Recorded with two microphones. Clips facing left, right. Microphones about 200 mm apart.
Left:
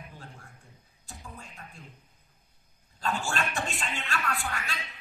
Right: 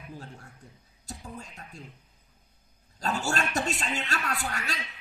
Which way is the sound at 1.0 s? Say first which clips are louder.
Right 5 dB; 40° right (ahead or behind).